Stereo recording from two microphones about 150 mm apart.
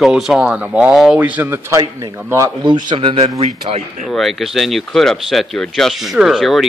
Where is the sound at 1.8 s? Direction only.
25° right (ahead or behind).